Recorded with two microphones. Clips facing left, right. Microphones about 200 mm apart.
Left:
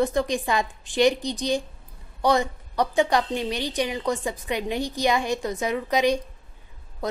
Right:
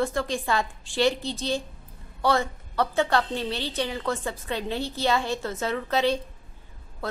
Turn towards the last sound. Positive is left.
turn(degrees=15)  # may be behind; listen again after turning